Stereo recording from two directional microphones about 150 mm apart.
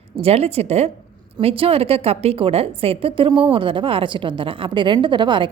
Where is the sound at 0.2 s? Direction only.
45° right (ahead or behind).